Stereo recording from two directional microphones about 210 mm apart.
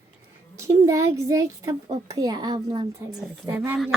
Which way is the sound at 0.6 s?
15° right (ahead or behind).